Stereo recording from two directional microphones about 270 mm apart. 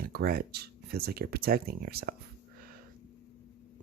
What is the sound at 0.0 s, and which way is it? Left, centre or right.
Speech, right.